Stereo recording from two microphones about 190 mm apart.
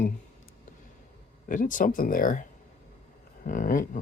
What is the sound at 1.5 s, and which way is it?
Speech, 45° left (ahead or behind).